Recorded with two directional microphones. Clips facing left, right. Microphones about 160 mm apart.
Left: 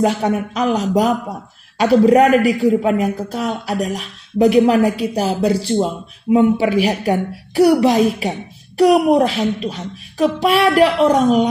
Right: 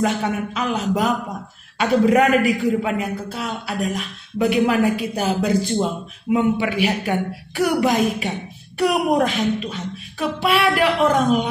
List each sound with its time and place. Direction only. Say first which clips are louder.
0.0 s a man's voice: left 4 dB; 40° left (ahead or behind)